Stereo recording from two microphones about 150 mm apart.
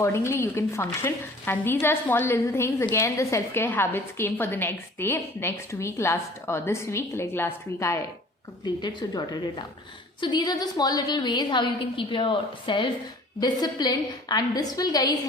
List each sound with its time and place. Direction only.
0.0 s a woman's voice: 20° left (ahead or behind)
8.6 s a woman's voice: 30° left (ahead or behind)